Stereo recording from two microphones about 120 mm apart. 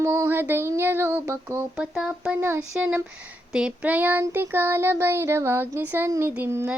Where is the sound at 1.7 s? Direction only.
5° right (ahead or behind).